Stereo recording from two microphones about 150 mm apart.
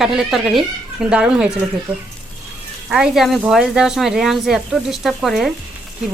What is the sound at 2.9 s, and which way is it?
Speech, 5° right (ahead or behind).